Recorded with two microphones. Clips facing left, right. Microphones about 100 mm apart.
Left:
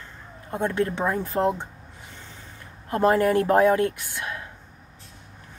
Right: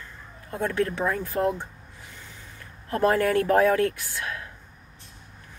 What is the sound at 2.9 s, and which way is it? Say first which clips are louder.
Speech: left 2 dB; 20° left (ahead or behind).